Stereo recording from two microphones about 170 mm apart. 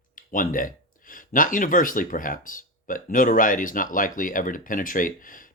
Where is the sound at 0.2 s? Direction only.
55° left (ahead or behind).